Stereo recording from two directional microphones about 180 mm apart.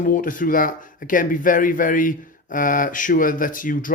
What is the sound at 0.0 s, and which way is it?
Speech, 50° left (ahead or behind).